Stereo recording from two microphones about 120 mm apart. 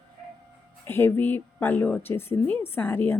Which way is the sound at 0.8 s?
20° left (ahead or behind).